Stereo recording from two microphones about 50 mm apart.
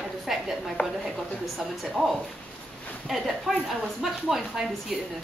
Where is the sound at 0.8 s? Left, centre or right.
Left.